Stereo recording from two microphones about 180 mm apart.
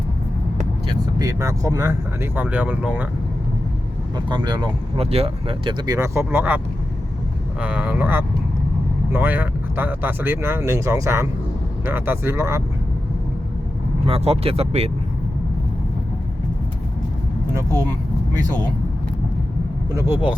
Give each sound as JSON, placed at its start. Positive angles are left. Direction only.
{"t": 0.9, "sound": "speech", "side_deg": -20}
{"t": 4.3, "sound": "speech", "side_deg": -25}
{"t": 7.6, "sound": "speech", "side_deg": -5}
{"t": 14.1, "sound": "speech", "side_deg": -30}
{"t": 17.5, "sound": "speech", "side_deg": -20}
{"t": 19.9, "sound": "speech", "side_deg": -15}